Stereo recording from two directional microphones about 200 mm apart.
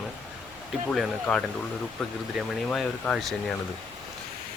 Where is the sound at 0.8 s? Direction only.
5° left (ahead or behind).